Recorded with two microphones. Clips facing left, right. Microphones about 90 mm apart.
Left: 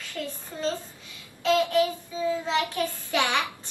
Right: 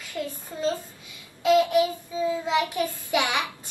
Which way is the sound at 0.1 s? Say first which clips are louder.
Right 3 dB; 15° right (ahead or behind).